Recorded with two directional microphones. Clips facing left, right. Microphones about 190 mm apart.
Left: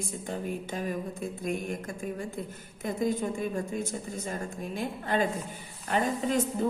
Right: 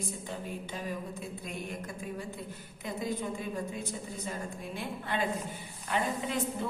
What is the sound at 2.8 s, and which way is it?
A woman's voice, 45° left (ahead or behind).